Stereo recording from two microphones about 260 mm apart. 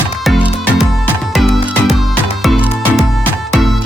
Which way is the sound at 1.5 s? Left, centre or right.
Left.